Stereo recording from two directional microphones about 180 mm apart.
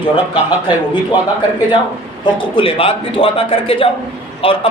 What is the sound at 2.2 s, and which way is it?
A man's voice, 30° left (ahead or behind).